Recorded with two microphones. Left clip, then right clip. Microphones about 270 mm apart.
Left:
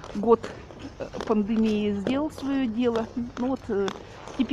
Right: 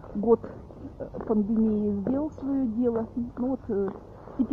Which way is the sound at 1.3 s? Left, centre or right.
Centre.